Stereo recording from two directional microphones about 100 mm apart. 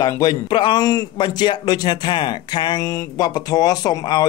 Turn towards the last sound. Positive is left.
turn(degrees=40)  # may be behind; listen again after turning